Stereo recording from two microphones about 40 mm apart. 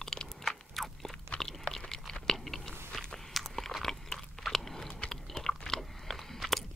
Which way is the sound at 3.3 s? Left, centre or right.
Centre.